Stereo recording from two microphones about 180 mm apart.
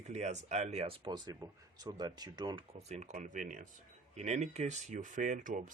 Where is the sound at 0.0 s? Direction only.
40° right (ahead or behind).